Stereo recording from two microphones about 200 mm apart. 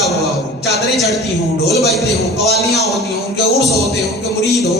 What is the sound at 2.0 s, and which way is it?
Speech, 15° left (ahead or behind).